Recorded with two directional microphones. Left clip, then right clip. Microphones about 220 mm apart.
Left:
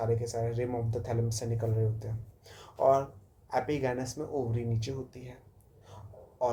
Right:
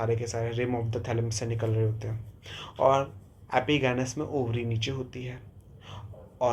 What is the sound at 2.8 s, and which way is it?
Speech, 25° right (ahead or behind).